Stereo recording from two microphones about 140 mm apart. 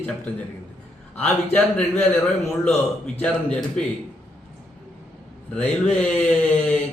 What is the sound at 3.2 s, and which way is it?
Speech, 5° left (ahead or behind).